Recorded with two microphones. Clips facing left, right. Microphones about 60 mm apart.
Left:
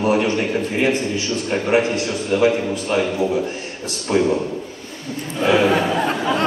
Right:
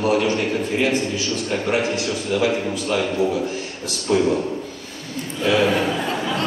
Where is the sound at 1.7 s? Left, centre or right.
Left.